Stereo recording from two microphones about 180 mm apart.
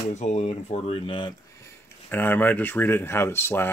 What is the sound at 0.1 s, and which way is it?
Speech, 40° left (ahead or behind).